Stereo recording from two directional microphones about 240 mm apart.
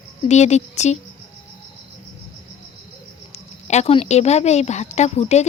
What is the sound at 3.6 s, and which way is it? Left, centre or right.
Speech, left.